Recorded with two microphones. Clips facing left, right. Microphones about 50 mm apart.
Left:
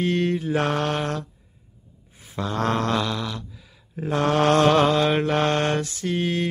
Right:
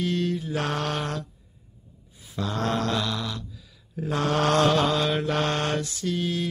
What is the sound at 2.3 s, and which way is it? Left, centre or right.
Speech, left.